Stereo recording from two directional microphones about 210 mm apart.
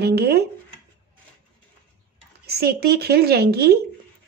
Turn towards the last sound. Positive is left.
turn(degrees=-50)  # may be behind; listen again after turning